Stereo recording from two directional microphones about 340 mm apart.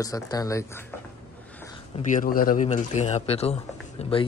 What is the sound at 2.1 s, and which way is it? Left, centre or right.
Speech, left.